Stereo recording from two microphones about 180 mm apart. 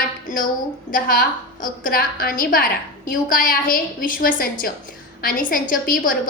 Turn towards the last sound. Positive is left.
turn(degrees=50)  # may be behind; listen again after turning